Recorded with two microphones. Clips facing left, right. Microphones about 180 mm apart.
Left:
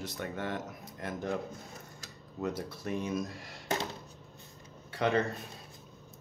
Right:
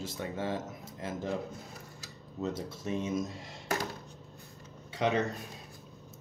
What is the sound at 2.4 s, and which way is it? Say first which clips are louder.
Speech: even; 25° right (ahead or behind).